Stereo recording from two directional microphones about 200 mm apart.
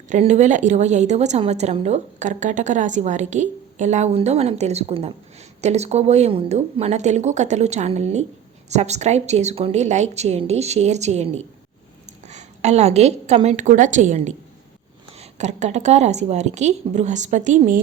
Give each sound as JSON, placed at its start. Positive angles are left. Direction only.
{"t": 0.1, "sound": "a woman's voice", "side_deg": -35}